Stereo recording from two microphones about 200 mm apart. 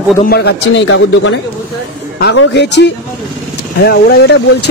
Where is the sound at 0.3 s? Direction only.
50° left (ahead or behind).